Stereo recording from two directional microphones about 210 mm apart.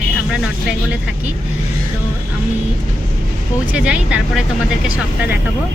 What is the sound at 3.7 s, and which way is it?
Speech, 5° right (ahead or behind).